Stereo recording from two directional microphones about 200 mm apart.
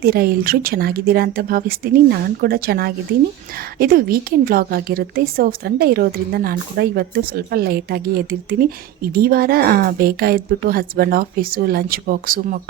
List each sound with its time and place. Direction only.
0.0 s a woman's voice: 50° right (ahead or behind)